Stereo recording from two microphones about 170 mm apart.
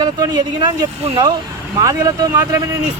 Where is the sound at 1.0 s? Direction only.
30° right (ahead or behind).